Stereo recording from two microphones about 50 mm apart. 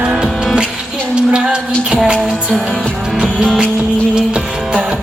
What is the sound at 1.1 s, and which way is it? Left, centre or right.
Music, centre.